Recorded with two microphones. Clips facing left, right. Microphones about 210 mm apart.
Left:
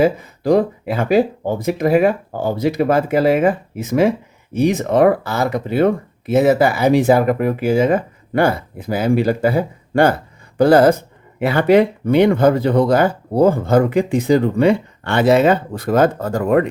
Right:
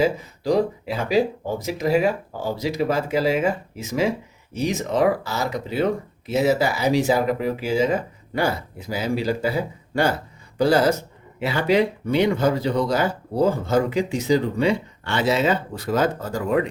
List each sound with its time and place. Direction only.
0.0 s speech: 55° left (ahead or behind)